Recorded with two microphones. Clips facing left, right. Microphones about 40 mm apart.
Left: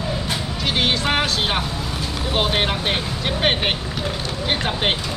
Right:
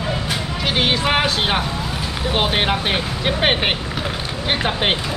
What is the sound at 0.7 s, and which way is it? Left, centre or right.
Speech, centre.